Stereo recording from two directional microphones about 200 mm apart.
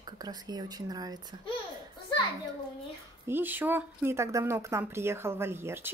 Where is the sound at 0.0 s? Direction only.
20° right (ahead or behind).